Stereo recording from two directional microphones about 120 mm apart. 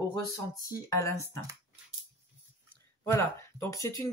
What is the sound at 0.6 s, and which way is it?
Speech, 30° left (ahead or behind).